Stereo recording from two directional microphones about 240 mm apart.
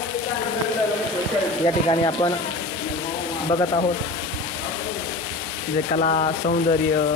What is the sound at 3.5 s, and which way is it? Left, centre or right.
Speech, centre.